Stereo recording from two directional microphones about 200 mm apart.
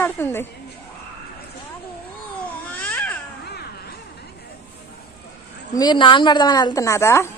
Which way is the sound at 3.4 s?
55° left (ahead or behind).